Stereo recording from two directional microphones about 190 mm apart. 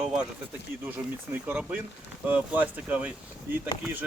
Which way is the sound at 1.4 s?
10° right (ahead or behind).